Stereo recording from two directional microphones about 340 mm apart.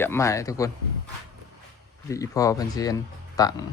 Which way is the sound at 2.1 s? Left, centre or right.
Centre.